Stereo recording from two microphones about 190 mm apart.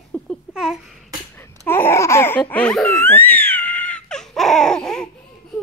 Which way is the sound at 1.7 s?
10° left (ahead or behind).